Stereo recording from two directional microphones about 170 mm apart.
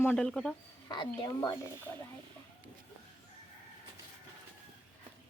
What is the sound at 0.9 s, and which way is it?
Speech, 25° left (ahead or behind).